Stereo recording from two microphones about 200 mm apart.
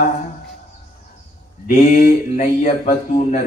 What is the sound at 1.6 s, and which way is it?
Speech, 40° left (ahead or behind).